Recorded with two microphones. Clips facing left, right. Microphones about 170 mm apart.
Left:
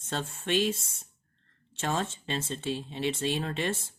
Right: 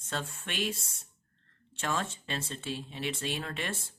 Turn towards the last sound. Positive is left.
turn(degrees=25)  # may be behind; listen again after turning